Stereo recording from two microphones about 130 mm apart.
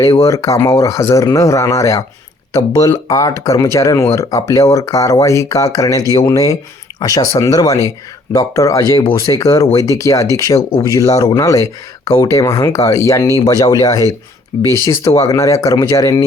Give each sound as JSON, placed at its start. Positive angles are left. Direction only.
{"t": 0.0, "sound": "speech", "side_deg": 25}